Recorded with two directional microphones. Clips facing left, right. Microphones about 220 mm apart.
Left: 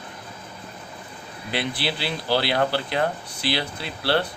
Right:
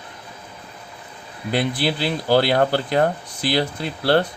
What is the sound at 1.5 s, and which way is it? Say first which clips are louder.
Speech: right 6 dB; 45° right (ahead or behind).